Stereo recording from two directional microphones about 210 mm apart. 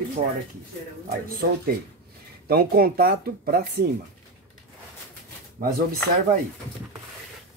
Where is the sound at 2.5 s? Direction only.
45° right (ahead or behind).